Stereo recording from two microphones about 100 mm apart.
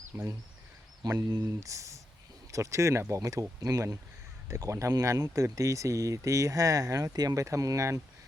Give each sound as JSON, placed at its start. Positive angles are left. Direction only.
{"t": 0.1, "sound": "speech", "side_deg": -25}
{"t": 1.3, "sound": "speech", "side_deg": -40}